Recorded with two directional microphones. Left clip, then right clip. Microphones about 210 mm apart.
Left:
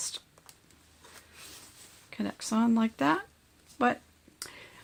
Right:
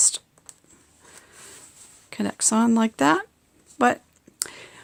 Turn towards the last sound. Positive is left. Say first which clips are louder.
# right 10 dB
turn(degrees=-35)  # may be behind; listen again after turning